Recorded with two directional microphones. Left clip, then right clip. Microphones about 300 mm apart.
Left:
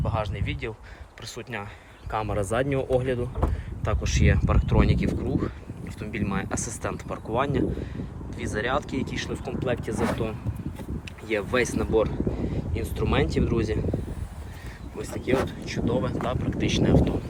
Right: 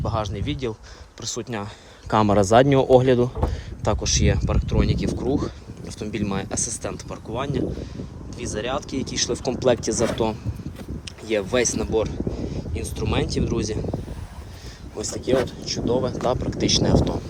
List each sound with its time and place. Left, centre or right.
0.0 s speech: centre
15.0 s speech: centre